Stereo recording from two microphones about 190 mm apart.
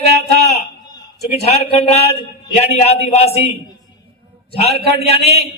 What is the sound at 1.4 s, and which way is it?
A man's voice, 35° left (ahead or behind).